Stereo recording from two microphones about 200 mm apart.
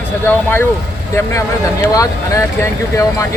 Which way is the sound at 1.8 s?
15° left (ahead or behind).